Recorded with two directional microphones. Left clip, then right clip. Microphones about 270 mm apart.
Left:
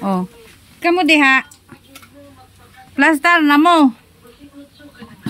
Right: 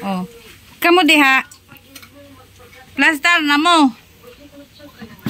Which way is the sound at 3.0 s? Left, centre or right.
Centre.